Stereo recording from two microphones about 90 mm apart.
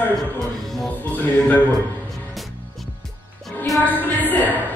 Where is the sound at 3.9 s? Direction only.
20° left (ahead or behind).